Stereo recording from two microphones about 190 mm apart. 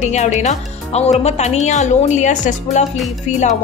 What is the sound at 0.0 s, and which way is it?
A woman's voice, 40° left (ahead or behind).